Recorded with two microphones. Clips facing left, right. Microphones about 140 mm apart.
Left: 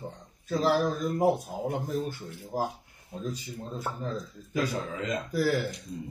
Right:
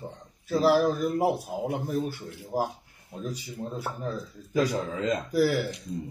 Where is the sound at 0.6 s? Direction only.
10° right (ahead or behind).